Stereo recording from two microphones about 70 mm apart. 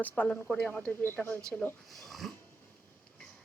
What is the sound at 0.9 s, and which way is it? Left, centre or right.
Speech, left.